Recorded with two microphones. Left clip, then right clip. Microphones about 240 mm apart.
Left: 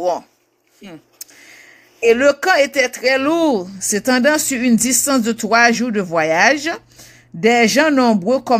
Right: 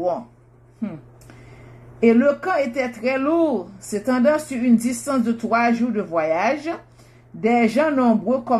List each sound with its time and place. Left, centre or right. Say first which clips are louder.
2.0 s speech: left 4 dB; left